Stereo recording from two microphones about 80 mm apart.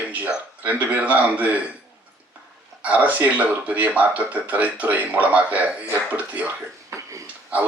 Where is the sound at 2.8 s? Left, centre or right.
Centre.